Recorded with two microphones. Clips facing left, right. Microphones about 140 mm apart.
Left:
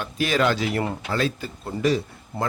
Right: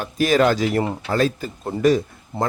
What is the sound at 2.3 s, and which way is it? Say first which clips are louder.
Speech: right 4 dB; 25° right (ahead or behind).